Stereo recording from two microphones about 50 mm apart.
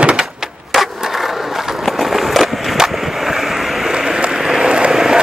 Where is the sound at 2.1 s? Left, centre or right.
Centre.